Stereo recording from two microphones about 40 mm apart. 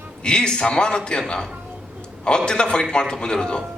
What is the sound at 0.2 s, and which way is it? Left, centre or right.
A man's voice, left.